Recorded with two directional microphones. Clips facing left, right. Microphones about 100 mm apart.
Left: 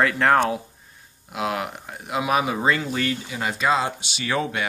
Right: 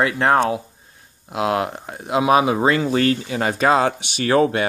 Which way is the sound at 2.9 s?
45° right (ahead or behind).